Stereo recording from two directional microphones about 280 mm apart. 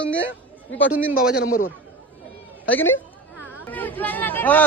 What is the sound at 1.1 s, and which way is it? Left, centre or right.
Speech, left.